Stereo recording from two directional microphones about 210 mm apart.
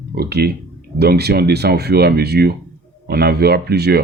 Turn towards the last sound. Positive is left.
turn(degrees=-50)  # may be behind; listen again after turning